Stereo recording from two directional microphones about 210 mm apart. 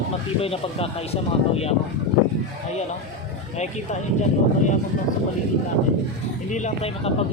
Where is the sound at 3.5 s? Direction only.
35° left (ahead or behind).